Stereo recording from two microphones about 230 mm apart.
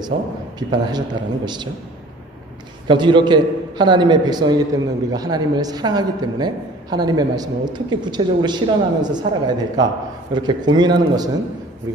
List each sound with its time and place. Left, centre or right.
0.6 s a man's voice: centre
2.9 s a man's voice: centre